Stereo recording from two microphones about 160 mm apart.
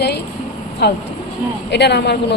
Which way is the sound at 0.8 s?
90° left.